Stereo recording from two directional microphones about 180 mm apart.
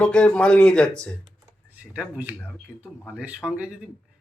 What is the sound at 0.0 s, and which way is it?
Speech, 5° left (ahead or behind).